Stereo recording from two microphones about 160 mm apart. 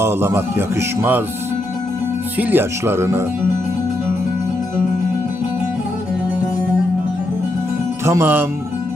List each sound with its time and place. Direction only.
0.0 s speech: 15° right (ahead or behind)
2.4 s speech: 10° right (ahead or behind)
8.0 s speech: 15° right (ahead or behind)